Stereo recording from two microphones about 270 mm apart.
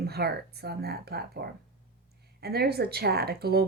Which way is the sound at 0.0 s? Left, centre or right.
Right.